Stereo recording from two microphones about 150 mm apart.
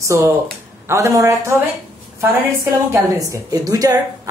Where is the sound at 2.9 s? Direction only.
20° right (ahead or behind).